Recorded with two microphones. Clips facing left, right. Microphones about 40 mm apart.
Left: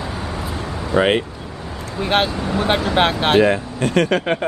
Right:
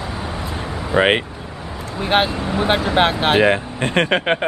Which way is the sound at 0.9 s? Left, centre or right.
Right.